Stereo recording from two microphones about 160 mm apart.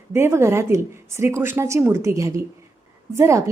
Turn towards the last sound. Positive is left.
turn(degrees=-15)  # may be behind; listen again after turning